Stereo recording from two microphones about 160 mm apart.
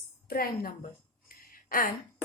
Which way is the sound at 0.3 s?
65° left (ahead or behind).